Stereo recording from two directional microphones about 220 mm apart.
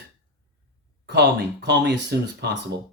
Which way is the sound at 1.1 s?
50° right (ahead or behind).